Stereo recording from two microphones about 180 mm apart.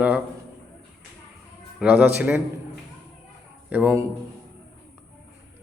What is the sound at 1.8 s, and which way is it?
Speech, 5° right (ahead or behind).